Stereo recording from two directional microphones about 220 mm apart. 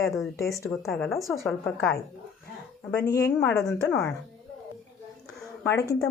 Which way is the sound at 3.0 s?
15° left (ahead or behind).